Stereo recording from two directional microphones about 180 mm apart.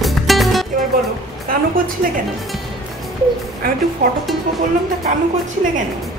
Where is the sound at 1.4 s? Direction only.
50° right (ahead or behind).